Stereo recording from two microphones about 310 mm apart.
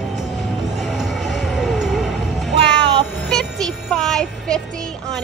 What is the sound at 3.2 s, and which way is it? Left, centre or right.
Child singing, centre.